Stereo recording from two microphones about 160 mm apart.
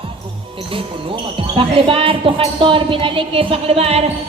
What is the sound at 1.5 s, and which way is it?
A woman's voice, 35° right (ahead or behind).